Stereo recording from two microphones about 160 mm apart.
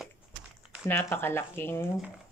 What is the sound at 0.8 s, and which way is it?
Speech, 15° left (ahead or behind).